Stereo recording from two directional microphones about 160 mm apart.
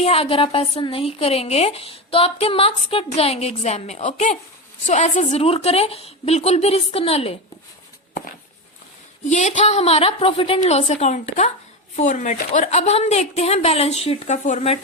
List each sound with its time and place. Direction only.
0.0 s a woman's voice: 40° left (ahead or behind)
9.3 s a woman's voice: 50° left (ahead or behind)